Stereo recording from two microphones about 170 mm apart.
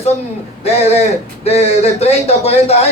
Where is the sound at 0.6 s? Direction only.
35° left (ahead or behind).